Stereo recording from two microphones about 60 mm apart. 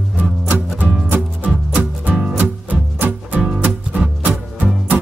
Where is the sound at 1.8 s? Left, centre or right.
Right.